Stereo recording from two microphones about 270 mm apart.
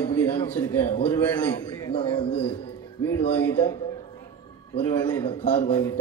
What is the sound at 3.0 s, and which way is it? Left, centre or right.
A man's voice, centre.